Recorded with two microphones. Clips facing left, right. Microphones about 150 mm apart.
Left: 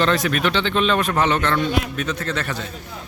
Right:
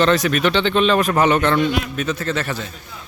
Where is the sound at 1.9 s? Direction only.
5° right (ahead or behind).